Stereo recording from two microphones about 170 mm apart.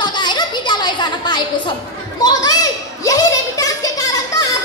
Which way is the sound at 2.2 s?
25° left (ahead or behind).